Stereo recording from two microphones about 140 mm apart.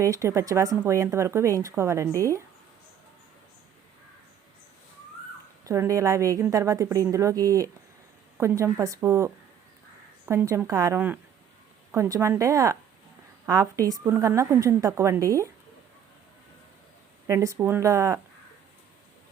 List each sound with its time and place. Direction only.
0.0 s a woman's voice: 20° right (ahead or behind)
5.6 s a woman's voice: 20° right (ahead or behind)
17.2 s a woman's voice: 20° right (ahead or behind)